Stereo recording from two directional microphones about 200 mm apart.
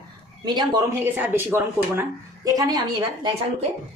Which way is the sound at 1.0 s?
10° right (ahead or behind).